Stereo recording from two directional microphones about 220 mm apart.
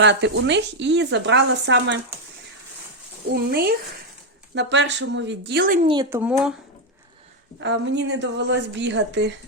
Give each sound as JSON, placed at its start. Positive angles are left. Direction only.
{"t": 0.0, "sound": "speech", "side_deg": -55}
{"t": 3.3, "sound": "speech", "side_deg": -45}
{"t": 5.9, "sound": "speech", "side_deg": -15}
{"t": 7.6, "sound": "speech", "side_deg": -55}